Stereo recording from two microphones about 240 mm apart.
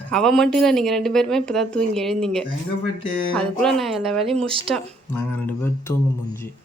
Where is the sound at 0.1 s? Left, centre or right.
Centre.